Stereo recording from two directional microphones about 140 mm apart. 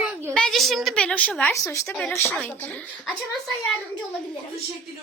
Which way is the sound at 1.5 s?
20° left (ahead or behind).